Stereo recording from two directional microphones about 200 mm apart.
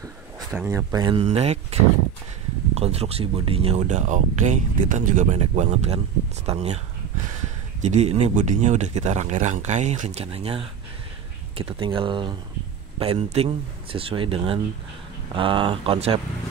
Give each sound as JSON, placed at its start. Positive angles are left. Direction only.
{"t": 0.5, "sound": "speech", "side_deg": -10}
{"t": 1.2, "sound": "speech", "side_deg": -35}
{"t": 7.8, "sound": "speech", "side_deg": -35}